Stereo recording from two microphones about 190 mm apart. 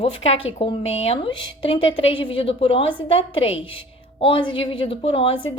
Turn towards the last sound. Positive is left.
turn(degrees=30)  # may be behind; listen again after turning